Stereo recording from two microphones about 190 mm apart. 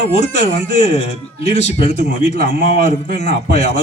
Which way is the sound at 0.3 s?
35° left (ahead or behind).